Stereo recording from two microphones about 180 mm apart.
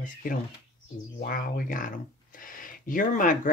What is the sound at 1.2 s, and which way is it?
Speech, 50° left (ahead or behind).